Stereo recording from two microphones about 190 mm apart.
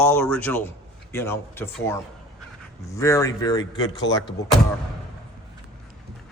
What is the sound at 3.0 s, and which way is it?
Speech, 15° left (ahead or behind).